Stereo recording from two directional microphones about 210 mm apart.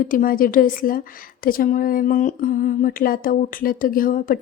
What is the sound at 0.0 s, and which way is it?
A woman's voice, 40° left (ahead or behind).